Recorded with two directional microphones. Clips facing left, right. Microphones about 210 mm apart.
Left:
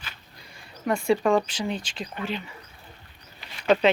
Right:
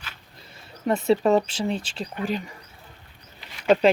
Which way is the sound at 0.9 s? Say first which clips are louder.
Right 2 dB; 25° right (ahead or behind).